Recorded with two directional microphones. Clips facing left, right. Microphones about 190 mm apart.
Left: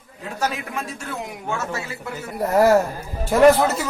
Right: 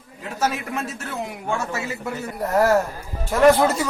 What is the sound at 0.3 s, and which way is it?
A man's voice, centre (ahead or behind).